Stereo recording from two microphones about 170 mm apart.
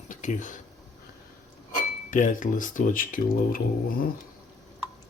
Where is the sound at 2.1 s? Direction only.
50° left (ahead or behind).